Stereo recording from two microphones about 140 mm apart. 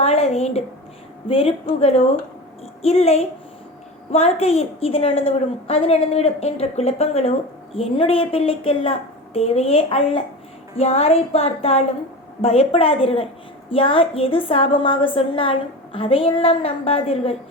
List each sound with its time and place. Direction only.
0.0 s a woman's voice: 45° left (ahead or behind)